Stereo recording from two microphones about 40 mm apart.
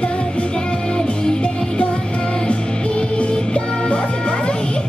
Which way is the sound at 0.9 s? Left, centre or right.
Centre.